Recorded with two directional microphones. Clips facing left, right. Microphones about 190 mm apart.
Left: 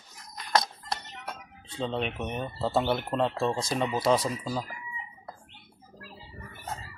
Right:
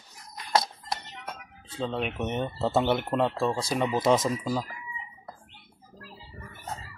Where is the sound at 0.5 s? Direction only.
5° right (ahead or behind).